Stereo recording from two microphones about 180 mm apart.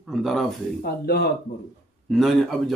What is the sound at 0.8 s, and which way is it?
Speech, 65° left (ahead or behind).